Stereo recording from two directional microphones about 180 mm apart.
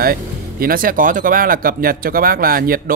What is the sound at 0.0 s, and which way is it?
Speech, 55° right (ahead or behind).